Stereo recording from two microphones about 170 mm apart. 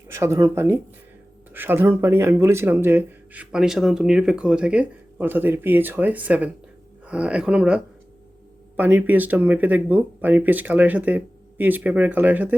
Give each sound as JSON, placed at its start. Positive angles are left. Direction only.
{"t": 0.1, "sound": "speech", "side_deg": -15}